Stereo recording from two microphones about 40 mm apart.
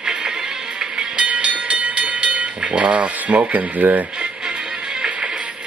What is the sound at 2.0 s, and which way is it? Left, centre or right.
Speech, right.